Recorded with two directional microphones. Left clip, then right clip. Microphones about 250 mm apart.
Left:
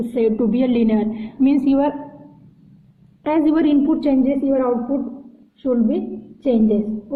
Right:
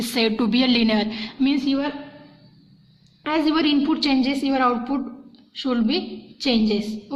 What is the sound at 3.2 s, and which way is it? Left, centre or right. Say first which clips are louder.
A woman's voice: left 4 dB; centre.